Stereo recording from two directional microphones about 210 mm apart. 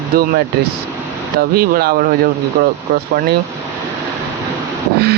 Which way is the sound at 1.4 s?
45° right (ahead or behind).